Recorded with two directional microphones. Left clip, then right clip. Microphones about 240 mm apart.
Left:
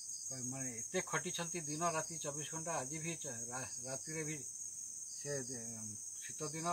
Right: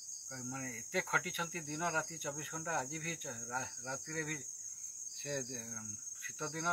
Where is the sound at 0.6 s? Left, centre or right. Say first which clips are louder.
Right 4 dB; centre.